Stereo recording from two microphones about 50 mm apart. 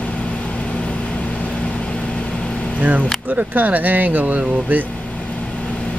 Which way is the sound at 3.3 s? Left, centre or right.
Right.